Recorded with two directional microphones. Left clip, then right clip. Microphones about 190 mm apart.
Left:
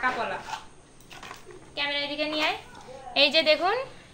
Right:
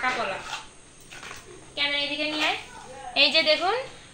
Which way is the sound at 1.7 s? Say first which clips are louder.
Right 2 dB; 20° left (ahead or behind).